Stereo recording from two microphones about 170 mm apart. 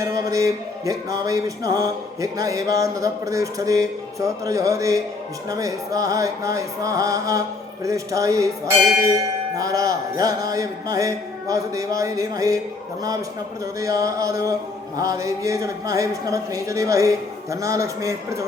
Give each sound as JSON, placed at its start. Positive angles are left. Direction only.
{"t": 0.0, "sound": "music", "side_deg": -20}
{"t": 9.6, "sound": "music", "side_deg": -20}
{"t": 13.7, "sound": "music", "side_deg": -20}